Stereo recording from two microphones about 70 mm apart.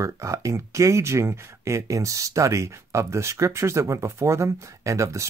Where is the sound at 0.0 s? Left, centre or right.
Right.